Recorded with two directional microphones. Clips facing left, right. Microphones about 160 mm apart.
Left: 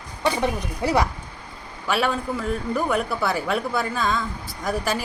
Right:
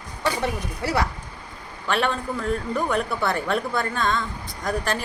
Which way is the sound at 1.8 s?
5° left (ahead or behind).